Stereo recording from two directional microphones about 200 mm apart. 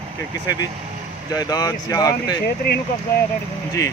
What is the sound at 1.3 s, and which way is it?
Speech, 20° left (ahead or behind).